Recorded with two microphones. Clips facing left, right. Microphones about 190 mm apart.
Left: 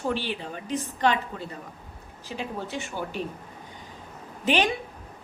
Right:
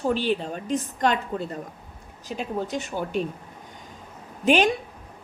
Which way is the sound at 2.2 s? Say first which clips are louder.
Right 4 dB; 45° right (ahead or behind).